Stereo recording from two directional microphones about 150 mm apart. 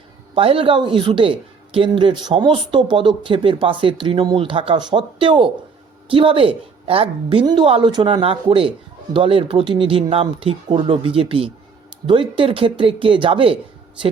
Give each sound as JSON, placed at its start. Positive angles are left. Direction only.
{"t": 0.3, "sound": "a woman's voice", "side_deg": -40}